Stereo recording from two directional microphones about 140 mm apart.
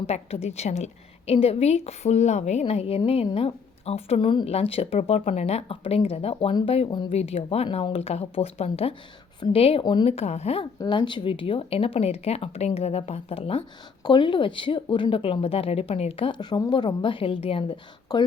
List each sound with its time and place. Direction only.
0.1 s a woman's voice: 50° left (ahead or behind)
10.1 s speech: 50° left (ahead or behind)
10.8 s a woman's voice: 35° left (ahead or behind)
18.1 s speech: 30° left (ahead or behind)